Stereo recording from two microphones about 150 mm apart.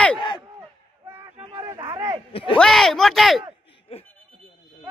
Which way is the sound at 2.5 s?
5° left (ahead or behind).